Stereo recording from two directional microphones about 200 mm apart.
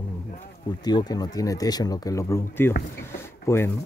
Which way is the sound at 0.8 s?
20° left (ahead or behind).